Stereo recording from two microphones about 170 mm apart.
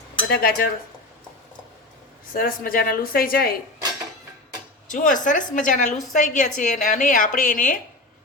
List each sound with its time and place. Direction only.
0.3 s a woman's voice: 60° left (ahead or behind)
2.3 s a woman's voice: 55° left (ahead or behind)
4.9 s a woman's voice: 50° left (ahead or behind)